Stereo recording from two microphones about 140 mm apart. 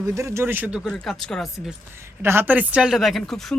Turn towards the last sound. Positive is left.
turn(degrees=5)  # may be behind; listen again after turning